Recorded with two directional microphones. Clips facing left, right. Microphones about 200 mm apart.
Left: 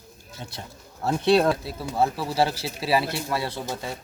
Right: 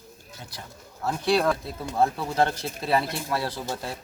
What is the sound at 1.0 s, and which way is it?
Speech, 25° left (ahead or behind).